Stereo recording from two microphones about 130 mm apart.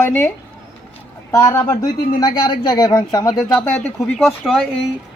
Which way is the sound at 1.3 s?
20° left (ahead or behind).